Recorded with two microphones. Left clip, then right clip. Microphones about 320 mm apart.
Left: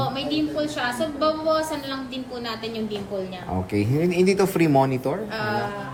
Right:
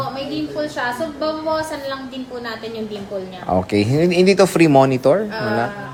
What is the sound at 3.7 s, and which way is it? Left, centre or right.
Speech, centre.